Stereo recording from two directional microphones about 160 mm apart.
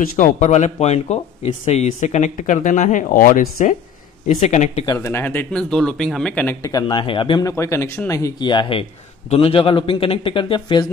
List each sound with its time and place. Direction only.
0.0 s speech: 60° left (ahead or behind)
4.3 s speech: 45° left (ahead or behind)
4.8 s speech: 15° left (ahead or behind)
6.6 s a man's voice: 25° left (ahead or behind)